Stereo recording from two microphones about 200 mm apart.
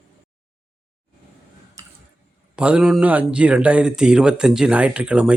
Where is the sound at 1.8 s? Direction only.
15° right (ahead or behind).